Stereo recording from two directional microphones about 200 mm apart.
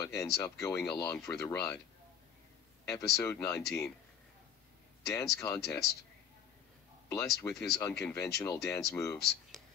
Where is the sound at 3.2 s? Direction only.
15° left (ahead or behind).